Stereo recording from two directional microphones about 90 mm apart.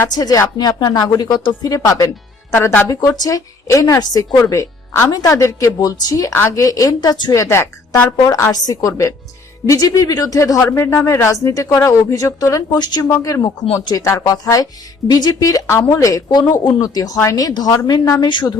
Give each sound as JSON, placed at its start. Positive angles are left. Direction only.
{"t": 0.1, "sound": "a woman's voice", "side_deg": 45}
{"t": 7.3, "sound": "speech", "side_deg": 35}
{"t": 8.5, "sound": "a woman's voice", "side_deg": 45}
{"t": 13.1, "sound": "a woman's voice", "side_deg": 35}
{"t": 15.6, "sound": "speech", "side_deg": 25}
{"t": 15.9, "sound": "a woman's voice", "side_deg": 40}
{"t": 16.3, "sound": "speech", "side_deg": 50}
{"t": 18.3, "sound": "a woman's voice", "side_deg": 60}